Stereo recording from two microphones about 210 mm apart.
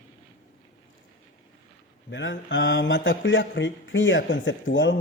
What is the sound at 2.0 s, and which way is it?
Speech, 60° left (ahead or behind).